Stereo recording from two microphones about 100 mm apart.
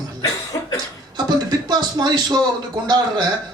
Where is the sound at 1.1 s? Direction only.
45° right (ahead or behind).